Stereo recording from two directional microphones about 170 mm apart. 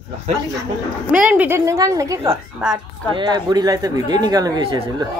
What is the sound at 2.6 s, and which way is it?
Speech, 5° right (ahead or behind).